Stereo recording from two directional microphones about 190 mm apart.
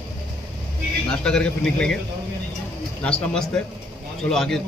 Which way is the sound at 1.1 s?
5° left (ahead or behind).